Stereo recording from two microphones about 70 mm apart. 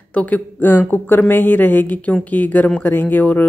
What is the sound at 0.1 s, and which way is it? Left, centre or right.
Speech, left.